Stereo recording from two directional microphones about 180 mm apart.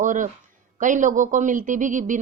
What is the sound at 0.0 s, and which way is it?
Speech, 45° right (ahead or behind).